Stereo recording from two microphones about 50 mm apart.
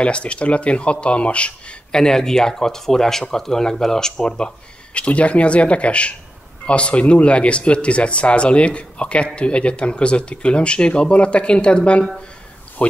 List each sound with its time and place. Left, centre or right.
0.0 s speech: left
4.9 s speech: left